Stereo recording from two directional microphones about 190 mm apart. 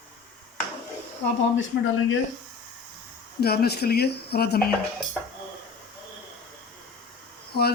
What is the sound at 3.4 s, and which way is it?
Speech, 55° left (ahead or behind).